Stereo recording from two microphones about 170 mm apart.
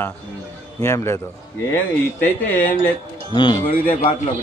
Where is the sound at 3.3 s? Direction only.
30° left (ahead or behind).